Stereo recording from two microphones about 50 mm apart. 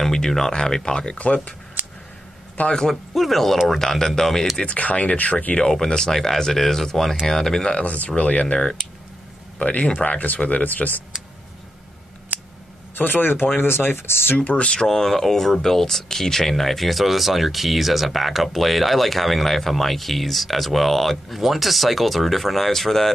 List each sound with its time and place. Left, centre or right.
0.0 s speech: centre; by 1.5 s left
2.7 s speech: centre
3.2 s speech: centre
4.7 s speech: left
5.7 s speech: centre
7.7 s speech: left
12.3 s scissors: right
12.9 s speech: left
14.3 s speech: left
14.7 s speech: centre